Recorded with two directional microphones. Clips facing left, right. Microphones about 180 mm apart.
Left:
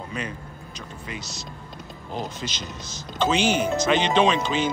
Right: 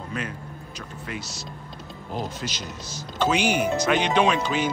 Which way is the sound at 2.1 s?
5° right (ahead or behind).